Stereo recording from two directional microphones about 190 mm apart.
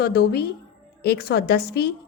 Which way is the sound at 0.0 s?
55° left (ahead or behind).